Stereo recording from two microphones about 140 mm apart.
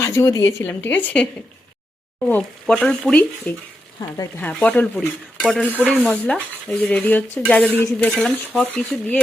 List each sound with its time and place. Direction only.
0.0 s speech: 20° left (ahead or behind)
0.6 s speech: 10° left (ahead or behind)